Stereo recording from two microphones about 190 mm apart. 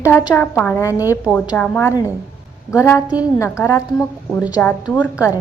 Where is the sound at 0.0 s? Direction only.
15° left (ahead or behind).